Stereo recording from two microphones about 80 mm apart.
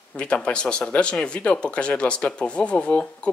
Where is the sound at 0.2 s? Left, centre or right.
Centre.